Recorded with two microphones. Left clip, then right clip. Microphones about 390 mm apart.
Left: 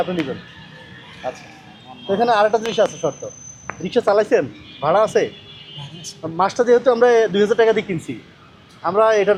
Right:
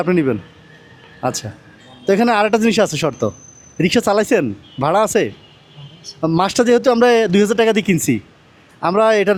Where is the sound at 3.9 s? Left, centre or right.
Right.